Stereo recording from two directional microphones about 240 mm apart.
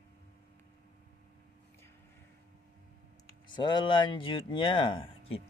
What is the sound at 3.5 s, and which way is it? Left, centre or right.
Speech, centre.